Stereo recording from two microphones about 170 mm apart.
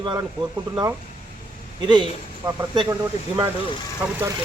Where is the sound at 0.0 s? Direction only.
25° right (ahead or behind).